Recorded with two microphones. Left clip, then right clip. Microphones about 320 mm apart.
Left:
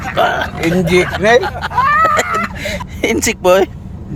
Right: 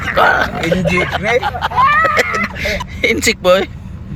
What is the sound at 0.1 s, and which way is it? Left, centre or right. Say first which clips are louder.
Speech: right 3 dB; centre.